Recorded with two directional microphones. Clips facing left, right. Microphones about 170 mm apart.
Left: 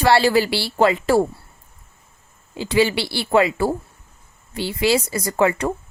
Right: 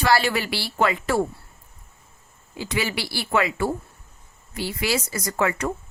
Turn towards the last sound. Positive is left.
turn(degrees=30)  # may be behind; listen again after turning